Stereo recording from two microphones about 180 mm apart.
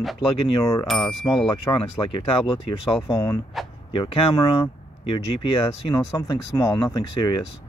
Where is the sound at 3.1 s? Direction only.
20° left (ahead or behind).